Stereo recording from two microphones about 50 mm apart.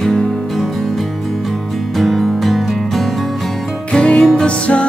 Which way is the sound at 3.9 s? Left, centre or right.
Left.